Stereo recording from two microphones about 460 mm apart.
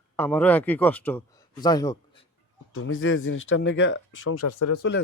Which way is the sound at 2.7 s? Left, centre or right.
Left.